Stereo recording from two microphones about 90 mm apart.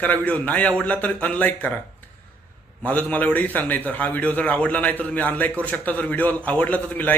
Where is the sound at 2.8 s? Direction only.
15° left (ahead or behind).